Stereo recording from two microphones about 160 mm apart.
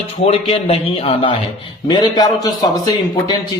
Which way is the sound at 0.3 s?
40° left (ahead or behind).